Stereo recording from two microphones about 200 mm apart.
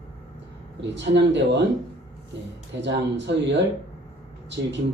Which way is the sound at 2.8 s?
60° right (ahead or behind).